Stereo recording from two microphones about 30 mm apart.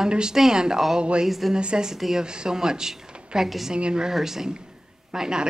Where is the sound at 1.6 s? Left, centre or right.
Right.